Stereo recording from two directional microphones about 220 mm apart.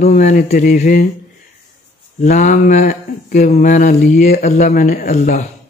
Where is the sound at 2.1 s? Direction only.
35° left (ahead or behind).